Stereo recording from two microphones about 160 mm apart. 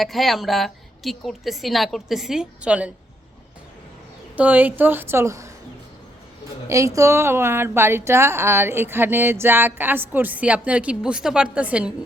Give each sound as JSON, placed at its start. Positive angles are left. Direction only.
{"t": 0.0, "sound": "a woman's voice", "side_deg": 0}
{"t": 4.4, "sound": "a woman's voice", "side_deg": -10}
{"t": 6.7, "sound": "a woman's voice", "side_deg": -20}